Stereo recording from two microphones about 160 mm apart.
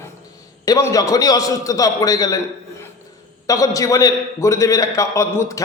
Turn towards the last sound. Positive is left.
turn(degrees=20)  # may be behind; listen again after turning